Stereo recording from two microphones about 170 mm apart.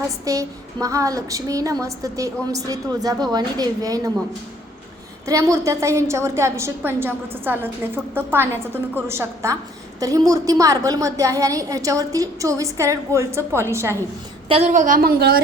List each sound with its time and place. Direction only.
0.3 s a woman's voice: 20° right (ahead or behind)
5.2 s a woman's voice: 20° right (ahead or behind)
14.4 s a woman's voice: 35° right (ahead or behind)
14.7 s a woman's voice: 50° right (ahead or behind)